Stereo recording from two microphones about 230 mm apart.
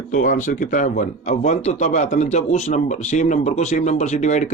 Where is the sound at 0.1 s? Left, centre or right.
Left.